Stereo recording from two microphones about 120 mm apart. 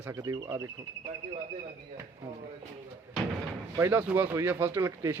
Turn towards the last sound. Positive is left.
turn(degrees=-25)  # may be behind; listen again after turning